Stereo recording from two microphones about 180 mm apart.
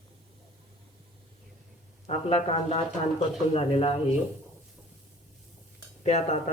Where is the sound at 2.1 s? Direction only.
35° left (ahead or behind).